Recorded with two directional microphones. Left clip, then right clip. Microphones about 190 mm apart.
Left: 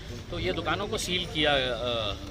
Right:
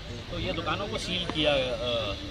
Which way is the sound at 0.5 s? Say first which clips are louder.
Left 2 dB; 15° left (ahead or behind).